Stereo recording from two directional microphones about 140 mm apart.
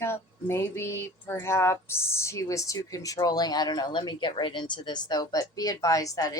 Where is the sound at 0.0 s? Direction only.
20° left (ahead or behind).